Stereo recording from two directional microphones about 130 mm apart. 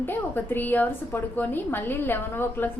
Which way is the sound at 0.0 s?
15° left (ahead or behind).